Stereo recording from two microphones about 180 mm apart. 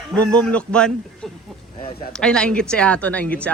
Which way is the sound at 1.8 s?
55° left (ahead or behind).